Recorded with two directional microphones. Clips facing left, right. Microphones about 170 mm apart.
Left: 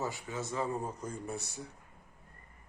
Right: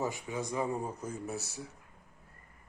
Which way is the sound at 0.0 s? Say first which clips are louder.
Right 2 dB; 15° right (ahead or behind).